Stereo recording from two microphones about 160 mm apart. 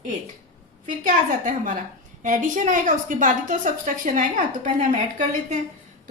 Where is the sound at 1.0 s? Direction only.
55° right (ahead or behind).